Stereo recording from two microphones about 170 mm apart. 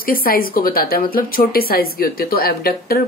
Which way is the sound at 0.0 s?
60° left (ahead or behind).